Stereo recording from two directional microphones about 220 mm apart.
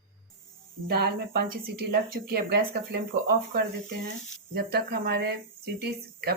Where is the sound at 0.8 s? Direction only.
45° right (ahead or behind).